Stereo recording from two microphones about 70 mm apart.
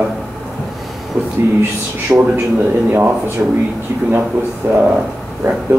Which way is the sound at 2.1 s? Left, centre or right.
Right.